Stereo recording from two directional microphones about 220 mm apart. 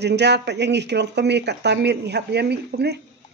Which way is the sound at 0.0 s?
50° right (ahead or behind).